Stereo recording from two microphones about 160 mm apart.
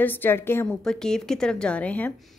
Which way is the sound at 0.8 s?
5° left (ahead or behind).